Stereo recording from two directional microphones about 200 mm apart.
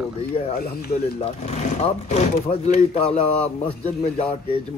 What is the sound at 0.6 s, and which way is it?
Speech, 50° left (ahead or behind).